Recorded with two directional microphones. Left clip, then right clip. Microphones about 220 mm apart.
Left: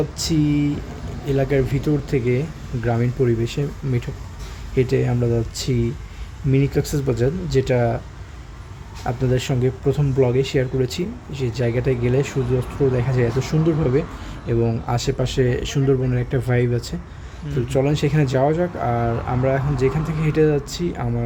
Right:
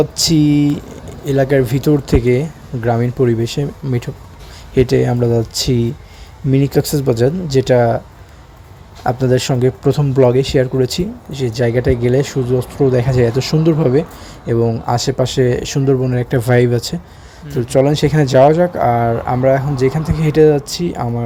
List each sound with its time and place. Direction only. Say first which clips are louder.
0.2 s speech: right 5 dB; 30° right (ahead or behind)
9.0 s speech: right 8 dB; 30° right (ahead or behind)